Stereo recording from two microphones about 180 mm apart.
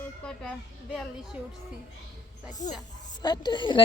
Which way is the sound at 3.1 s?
25° left (ahead or behind).